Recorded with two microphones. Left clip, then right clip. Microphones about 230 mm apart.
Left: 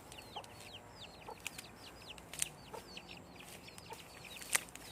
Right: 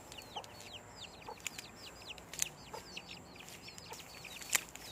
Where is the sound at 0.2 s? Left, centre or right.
Right.